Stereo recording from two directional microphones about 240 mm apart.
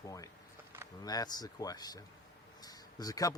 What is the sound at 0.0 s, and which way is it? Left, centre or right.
Speech, centre.